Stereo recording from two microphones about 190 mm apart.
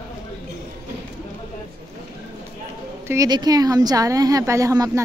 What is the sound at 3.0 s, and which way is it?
Speech, 20° right (ahead or behind).